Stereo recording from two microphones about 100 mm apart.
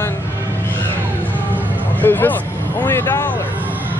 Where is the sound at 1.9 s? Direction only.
20° left (ahead or behind).